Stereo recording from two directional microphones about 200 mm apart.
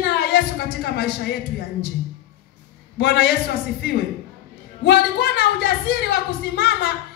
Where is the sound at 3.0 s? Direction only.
55° left (ahead or behind).